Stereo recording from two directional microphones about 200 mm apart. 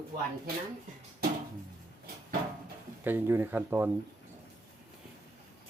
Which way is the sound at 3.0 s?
10° right (ahead or behind).